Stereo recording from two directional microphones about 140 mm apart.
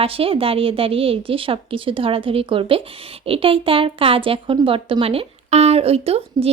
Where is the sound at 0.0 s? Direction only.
40° right (ahead or behind).